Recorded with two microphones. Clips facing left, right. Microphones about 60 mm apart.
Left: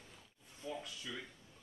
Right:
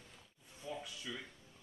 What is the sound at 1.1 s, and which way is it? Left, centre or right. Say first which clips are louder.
Speech: even; centre.